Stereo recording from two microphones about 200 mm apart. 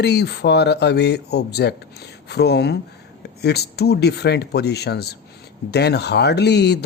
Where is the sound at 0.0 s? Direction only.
55° left (ahead or behind).